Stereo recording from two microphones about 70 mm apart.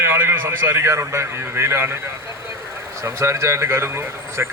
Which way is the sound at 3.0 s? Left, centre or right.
Right.